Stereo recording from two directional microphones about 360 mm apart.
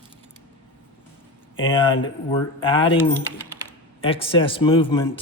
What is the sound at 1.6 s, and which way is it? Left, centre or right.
A man's voice, centre.